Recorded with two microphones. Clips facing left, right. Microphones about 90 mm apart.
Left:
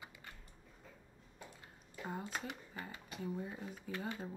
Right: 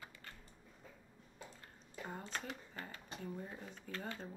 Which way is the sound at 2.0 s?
5° left (ahead or behind).